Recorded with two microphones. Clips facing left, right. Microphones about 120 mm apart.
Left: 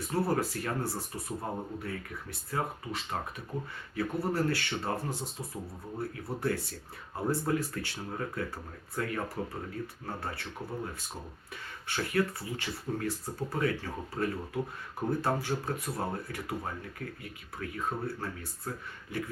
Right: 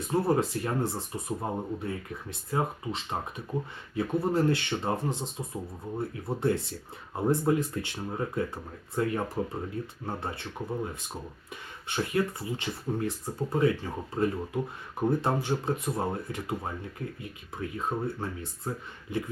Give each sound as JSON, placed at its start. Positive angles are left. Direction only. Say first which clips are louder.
{"t": 0.1, "sound": "speech", "louder": "right 4 dB", "side_deg": -25}
{"t": 11.9, "sound": "speech", "louder": "right 2 dB", "side_deg": -20}